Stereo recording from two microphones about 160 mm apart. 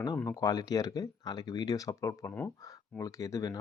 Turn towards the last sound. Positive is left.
turn(degrees=20)  # may be behind; listen again after turning